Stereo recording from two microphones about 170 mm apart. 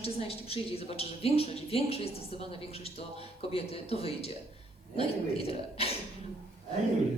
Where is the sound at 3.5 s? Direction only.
35° left (ahead or behind).